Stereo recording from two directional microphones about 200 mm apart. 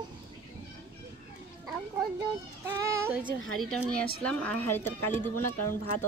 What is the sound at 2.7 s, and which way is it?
Speech, 15° right (ahead or behind).